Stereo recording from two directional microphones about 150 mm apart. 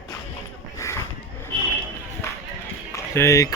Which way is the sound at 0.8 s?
20° left (ahead or behind).